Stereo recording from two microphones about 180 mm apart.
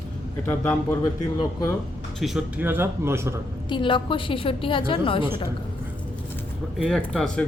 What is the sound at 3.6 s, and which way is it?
A woman's voice, 25° left (ahead or behind).